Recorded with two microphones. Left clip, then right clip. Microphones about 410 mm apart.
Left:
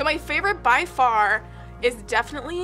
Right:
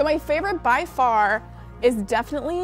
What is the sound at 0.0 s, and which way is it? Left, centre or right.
A woman's voice, right.